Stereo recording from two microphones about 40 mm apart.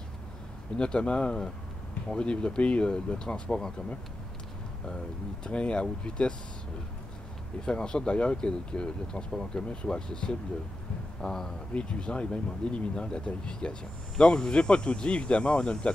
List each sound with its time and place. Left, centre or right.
0.7 s speech: left
4.8 s speech: left
7.6 s speech: left
11.7 s speech: left